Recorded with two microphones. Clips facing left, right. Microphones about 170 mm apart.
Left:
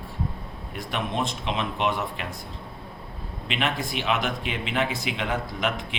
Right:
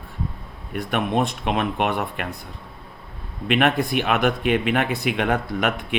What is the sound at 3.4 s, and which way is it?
Speech, 60° right (ahead or behind).